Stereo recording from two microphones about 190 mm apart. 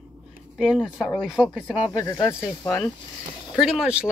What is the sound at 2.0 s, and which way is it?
Speech, 15° left (ahead or behind).